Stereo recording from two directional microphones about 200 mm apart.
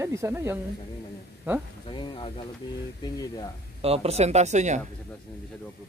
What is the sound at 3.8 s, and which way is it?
Speech, 30° right (ahead or behind).